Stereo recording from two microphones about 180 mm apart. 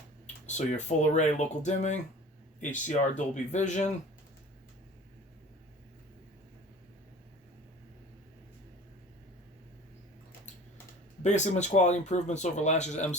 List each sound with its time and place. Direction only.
0.4 s speech: 40° left (ahead or behind)
11.2 s speech: 40° left (ahead or behind)